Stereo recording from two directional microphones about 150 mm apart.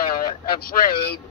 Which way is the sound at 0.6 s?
85° left.